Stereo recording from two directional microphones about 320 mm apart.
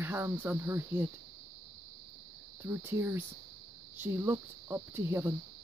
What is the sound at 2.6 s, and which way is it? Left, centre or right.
Speech, centre.